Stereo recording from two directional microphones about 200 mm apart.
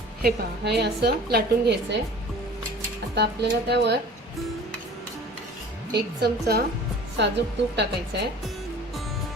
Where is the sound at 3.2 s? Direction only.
55° right (ahead or behind).